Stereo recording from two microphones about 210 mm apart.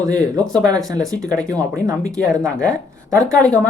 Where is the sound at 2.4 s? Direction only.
5° left (ahead or behind).